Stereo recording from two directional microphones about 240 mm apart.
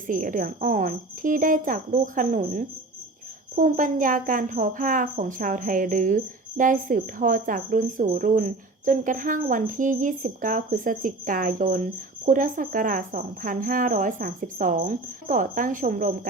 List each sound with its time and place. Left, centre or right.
0.1 s speech: right